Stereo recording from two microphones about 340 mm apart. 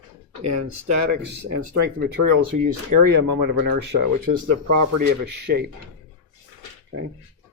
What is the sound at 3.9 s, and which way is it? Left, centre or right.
Speech, right.